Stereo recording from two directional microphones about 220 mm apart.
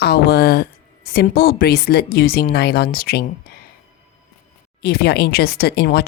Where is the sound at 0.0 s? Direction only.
45° left (ahead or behind).